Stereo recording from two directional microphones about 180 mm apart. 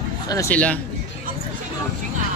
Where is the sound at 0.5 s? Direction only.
5° left (ahead or behind).